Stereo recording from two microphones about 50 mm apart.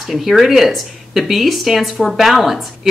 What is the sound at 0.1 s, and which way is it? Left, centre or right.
Speech, centre.